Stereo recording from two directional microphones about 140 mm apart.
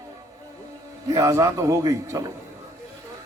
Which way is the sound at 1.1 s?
25° right (ahead or behind).